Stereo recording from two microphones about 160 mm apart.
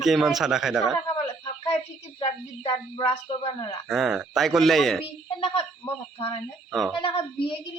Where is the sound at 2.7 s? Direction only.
35° left (ahead or behind).